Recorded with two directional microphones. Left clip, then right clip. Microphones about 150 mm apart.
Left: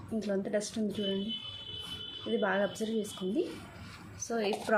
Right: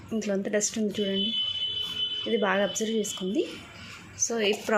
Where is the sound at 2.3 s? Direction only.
45° right (ahead or behind).